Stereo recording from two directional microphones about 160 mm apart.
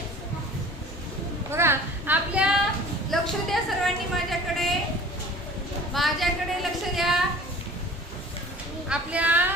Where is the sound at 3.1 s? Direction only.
Centre (ahead or behind).